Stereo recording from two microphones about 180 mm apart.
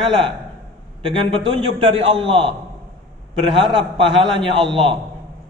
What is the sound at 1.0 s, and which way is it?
A man's voice, 30° right (ahead or behind).